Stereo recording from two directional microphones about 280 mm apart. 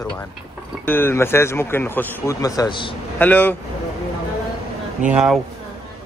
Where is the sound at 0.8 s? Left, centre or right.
Centre.